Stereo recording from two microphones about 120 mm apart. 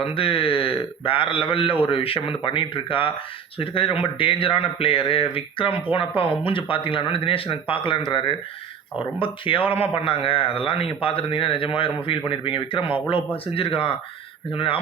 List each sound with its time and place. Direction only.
0.0 s a man's voice: 50° left (ahead or behind)
9.1 s a man's voice: 45° left (ahead or behind)